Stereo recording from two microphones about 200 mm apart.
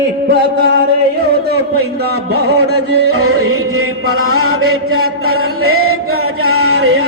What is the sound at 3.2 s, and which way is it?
Chant, 90° right.